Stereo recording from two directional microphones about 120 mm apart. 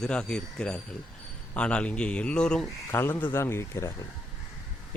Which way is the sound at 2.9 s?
20° left (ahead or behind).